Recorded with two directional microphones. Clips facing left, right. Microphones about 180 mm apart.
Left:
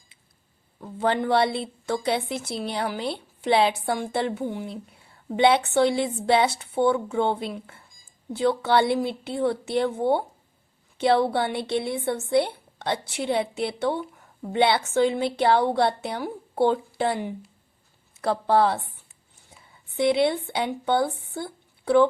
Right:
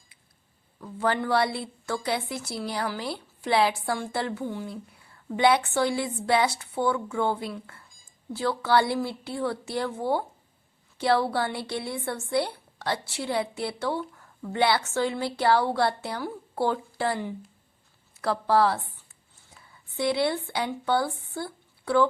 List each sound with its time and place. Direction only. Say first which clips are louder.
0.8 s a woman's voice: left 3 dB; 25° left (ahead or behind)